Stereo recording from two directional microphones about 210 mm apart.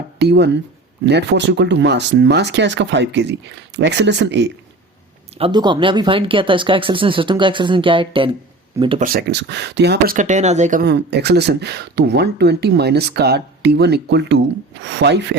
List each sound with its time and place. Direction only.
0.2 s speech: 55° right (ahead or behind)
5.4 s speech: 20° right (ahead or behind)
9.0 s speech: 50° right (ahead or behind)
10.2 s speech: 35° right (ahead or behind); by 15.4 s 55° right (ahead or behind)